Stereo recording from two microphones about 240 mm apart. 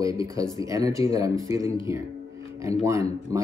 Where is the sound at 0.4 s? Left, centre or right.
Centre.